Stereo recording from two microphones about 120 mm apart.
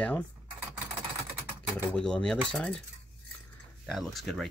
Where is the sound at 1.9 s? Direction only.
5° left (ahead or behind).